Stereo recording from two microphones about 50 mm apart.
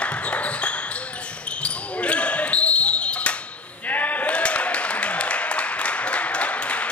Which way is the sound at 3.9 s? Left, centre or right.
Left.